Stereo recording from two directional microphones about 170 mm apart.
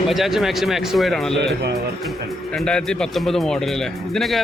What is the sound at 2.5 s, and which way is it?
Speech, 5° left (ahead or behind).